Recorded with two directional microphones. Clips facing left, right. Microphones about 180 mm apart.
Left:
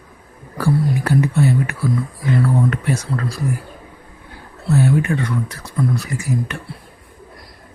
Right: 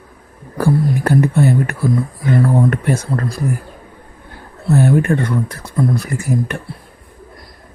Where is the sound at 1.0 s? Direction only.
50° right (ahead or behind).